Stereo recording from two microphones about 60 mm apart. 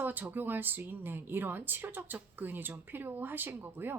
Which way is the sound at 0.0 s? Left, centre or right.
Right.